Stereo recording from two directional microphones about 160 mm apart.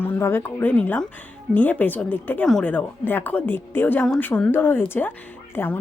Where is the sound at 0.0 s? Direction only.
15° left (ahead or behind).